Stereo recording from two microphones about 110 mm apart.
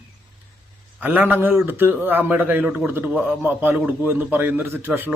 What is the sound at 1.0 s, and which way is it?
A man's voice, 15° right (ahead or behind).